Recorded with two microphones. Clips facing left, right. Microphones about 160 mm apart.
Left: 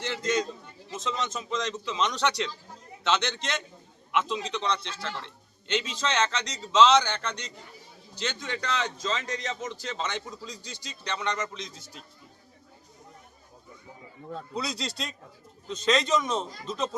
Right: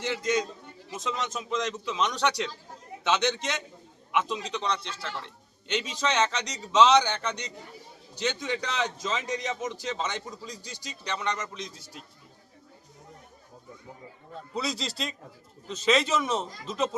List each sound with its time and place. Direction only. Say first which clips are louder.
0.0 s a man's voice: right 1 dB; 15° right (ahead or behind)
9.0 s speech: even; 5° right (ahead or behind)
9.3 s a man's voice: right 2 dB; 15° right (ahead or behind)
14.5 s speech: right 2 dB; centre (ahead or behind)